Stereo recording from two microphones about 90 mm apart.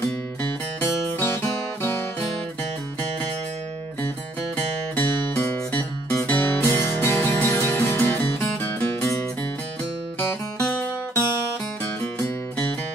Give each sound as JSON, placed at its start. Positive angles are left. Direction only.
{"t": 0.7, "sound": "music", "side_deg": 25}
{"t": 4.6, "sound": "music", "side_deg": 25}
{"t": 10.1, "sound": "music", "side_deg": 15}